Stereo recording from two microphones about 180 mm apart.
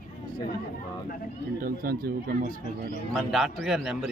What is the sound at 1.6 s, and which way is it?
Speech, 55° right (ahead or behind).